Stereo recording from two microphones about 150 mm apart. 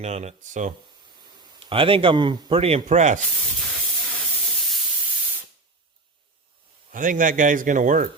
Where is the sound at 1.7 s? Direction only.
35° right (ahead or behind); by 3.2 s 50° right (ahead or behind).